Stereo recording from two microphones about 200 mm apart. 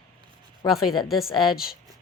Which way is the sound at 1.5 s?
50° left (ahead or behind).